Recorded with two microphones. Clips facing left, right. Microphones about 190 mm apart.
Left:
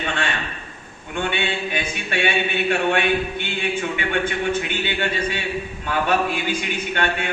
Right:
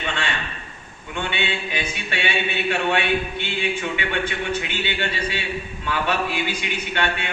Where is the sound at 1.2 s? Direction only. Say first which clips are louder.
Left 3 dB; 50° left (ahead or behind).